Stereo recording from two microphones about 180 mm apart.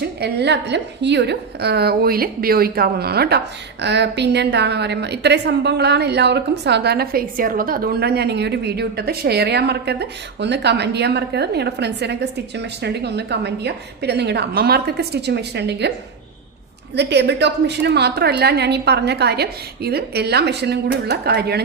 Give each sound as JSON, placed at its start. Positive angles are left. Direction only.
{"t": 0.0, "sound": "a woman's voice", "side_deg": -65}
{"t": 16.9, "sound": "a woman's voice", "side_deg": -70}